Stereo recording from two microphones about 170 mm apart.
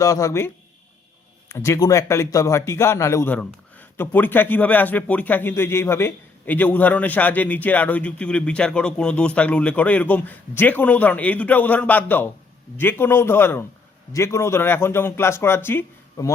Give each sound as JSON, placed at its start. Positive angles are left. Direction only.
{"t": 0.0, "sound": "speech", "side_deg": 20}